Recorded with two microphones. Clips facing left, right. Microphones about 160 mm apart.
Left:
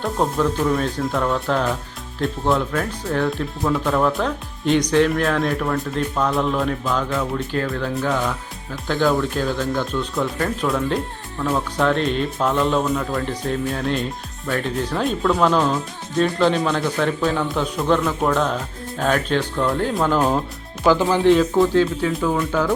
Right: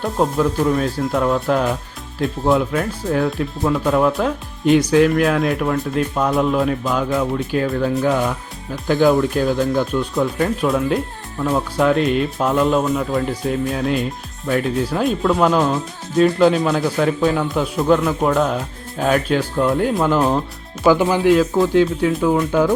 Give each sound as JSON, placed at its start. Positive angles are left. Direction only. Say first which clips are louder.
{"t": 0.0, "sound": "speech", "louder": "right 2 dB", "side_deg": -10}
{"t": 10.7, "sound": "speech", "louder": "right 3 dB", "side_deg": -5}